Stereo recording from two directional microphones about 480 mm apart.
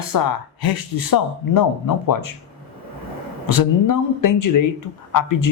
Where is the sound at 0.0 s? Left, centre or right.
Left.